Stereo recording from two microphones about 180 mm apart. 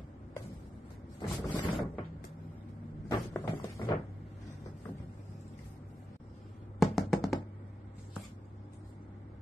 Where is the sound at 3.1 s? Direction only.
15° left (ahead or behind).